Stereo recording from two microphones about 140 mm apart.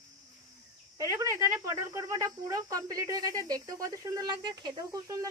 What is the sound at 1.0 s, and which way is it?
Speech, 20° right (ahead or behind).